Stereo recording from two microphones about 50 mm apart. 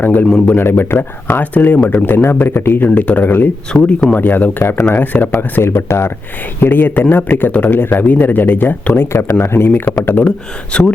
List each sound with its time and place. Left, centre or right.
0.0 s speech: left
2.3 s speech: left
2.9 s speech: left
3.7 s speech: centre
4.1 s speech: left
6.6 s speech: left
8.9 s speech: left
9.6 s speech: left
10.7 s speech: left